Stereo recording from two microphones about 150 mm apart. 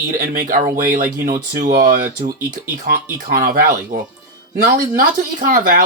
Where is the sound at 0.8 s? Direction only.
65° right (ahead or behind).